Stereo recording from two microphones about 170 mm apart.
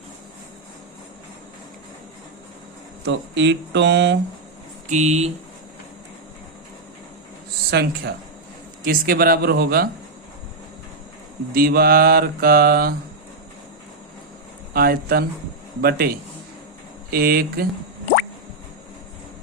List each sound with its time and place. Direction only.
3.1 s speech: 90° right
4.9 s speech: 40° right (ahead or behind)
7.7 s speech: 70° right (ahead or behind)
8.8 s mantra: 60° right (ahead or behind)
11.5 s mantra: 65° right (ahead or behind)
14.7 s mantra: 65° right (ahead or behind)